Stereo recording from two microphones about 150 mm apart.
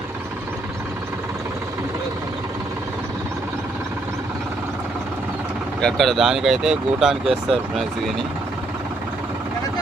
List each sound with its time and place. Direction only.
5.8 s speech: centre (ahead or behind)